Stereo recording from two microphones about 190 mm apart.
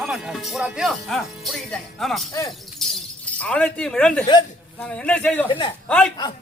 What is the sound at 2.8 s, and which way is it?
Shatter, centre (ahead or behind).